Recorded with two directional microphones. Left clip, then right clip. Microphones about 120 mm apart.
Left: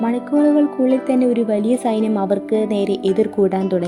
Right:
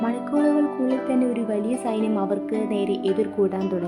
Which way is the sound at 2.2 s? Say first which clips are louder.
Left 7 dB; 45° left (ahead or behind).